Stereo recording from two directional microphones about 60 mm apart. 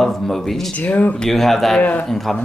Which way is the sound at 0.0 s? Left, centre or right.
Centre.